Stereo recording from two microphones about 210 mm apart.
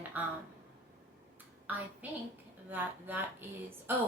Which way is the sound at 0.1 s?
10° right (ahead or behind).